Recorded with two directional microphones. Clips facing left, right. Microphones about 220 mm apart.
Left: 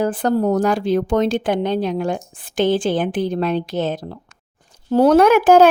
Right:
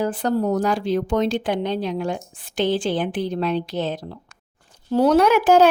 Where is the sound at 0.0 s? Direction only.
50° left (ahead or behind).